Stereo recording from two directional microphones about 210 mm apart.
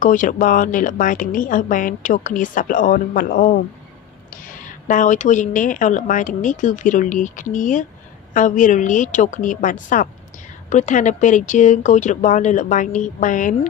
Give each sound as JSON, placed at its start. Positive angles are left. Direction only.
{"t": 0.0, "sound": "a woman's voice", "side_deg": 40}